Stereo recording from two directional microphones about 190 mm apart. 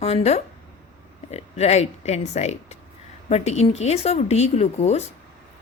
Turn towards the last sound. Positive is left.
turn(degrees=35)  # may be behind; listen again after turning